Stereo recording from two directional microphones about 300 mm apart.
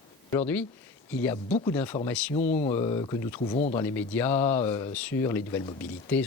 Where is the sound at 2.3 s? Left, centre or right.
Left.